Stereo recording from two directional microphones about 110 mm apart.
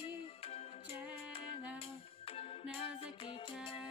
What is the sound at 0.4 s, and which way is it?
Music, 70° left (ahead or behind).